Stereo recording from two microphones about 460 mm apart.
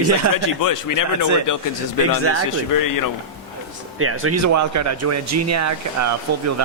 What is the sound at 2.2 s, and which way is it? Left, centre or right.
Speech, right.